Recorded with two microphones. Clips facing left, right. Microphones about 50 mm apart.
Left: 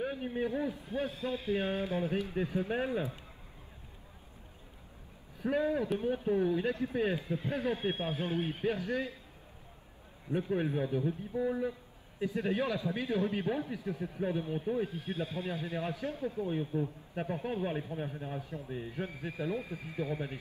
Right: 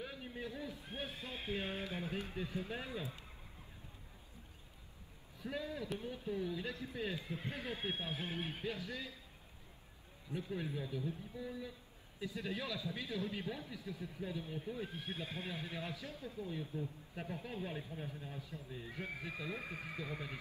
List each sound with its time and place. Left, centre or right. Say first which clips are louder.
0.0 s a sound: left 11 dB; left
1.5 s a man's voice: left 8 dB; left
5.4 s a man's voice: left 12 dB; left
8.3 s a man's voice: left 9 dB; left
10.3 s a man's voice: left 10 dB; left
19.6 s speech: left 3 dB; right
20.0 s a man's voice: left 12 dB; left